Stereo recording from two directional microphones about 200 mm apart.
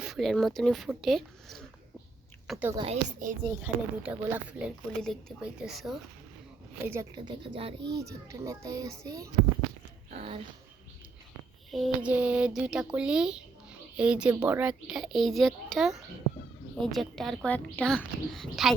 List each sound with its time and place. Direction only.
0.0 s a child's voice: centre (ahead or behind)
2.7 s speech: 30° right (ahead or behind)
3.6 s speech: 10° right (ahead or behind)
6.8 s a child's voice: 10° right (ahead or behind)
7.2 s a child's voice: 25° right (ahead or behind)
11.7 s speech: 5° right (ahead or behind)